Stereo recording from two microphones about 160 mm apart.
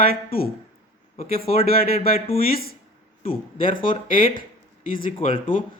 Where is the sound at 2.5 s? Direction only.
70° left (ahead or behind).